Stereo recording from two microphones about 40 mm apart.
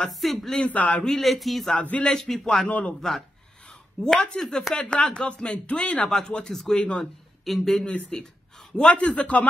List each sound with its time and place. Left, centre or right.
0.1 s speech: centre
0.7 s a man's voice: left
1.2 s speech: centre
1.8 s a man's voice: left
2.1 s speech: centre
2.7 s a man's voice: left
3.2 s a sound: left
4.1 s speech: centre
4.7 s speech: left
6.5 s speech: centre
6.8 s speech: left
7.4 s speech: centre
8.7 s a man's voice: left